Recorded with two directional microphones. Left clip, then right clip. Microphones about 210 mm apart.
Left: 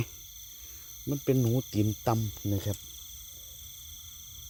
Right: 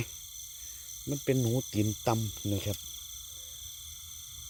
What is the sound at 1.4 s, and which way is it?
Speech, 15° left (ahead or behind).